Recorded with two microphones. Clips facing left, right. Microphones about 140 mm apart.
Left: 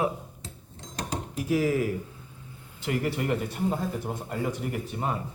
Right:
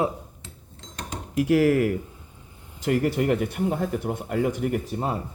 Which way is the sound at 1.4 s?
65° right (ahead or behind).